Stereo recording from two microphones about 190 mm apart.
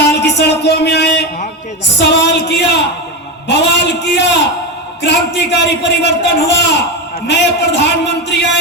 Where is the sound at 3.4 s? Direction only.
65° left (ahead or behind).